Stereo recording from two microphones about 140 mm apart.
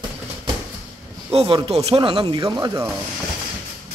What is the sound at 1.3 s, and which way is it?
A man's voice, 40° right (ahead or behind).